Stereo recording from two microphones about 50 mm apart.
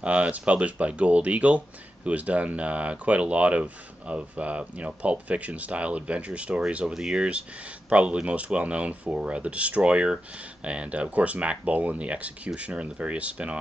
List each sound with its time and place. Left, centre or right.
0.0 s speech: right
6.9 s speech: centre